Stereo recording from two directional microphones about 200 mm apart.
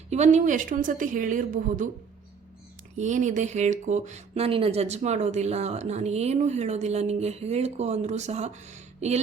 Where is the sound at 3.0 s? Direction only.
35° right (ahead or behind).